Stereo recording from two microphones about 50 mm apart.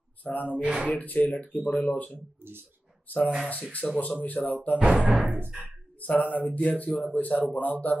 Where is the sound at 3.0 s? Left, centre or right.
Left.